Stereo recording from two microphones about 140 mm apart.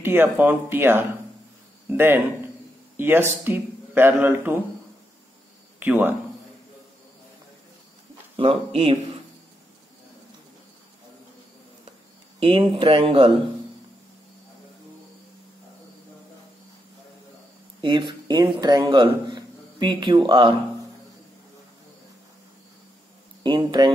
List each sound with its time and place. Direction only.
0.0 s speech: 15° right (ahead or behind)
5.8 s a man's voice: 15° right (ahead or behind)
8.4 s speech: 40° right (ahead or behind)
12.4 s speech: 40° right (ahead or behind)
17.8 s speech: 30° right (ahead or behind)
23.4 s speech: 35° right (ahead or behind)